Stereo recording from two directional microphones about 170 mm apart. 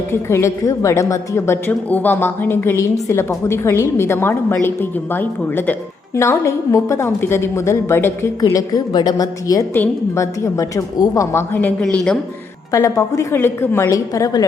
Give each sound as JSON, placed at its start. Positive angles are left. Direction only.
{"t": 0.1, "sound": "a woman's voice", "side_deg": 15}
{"t": 12.7, "sound": "a woman's voice", "side_deg": 20}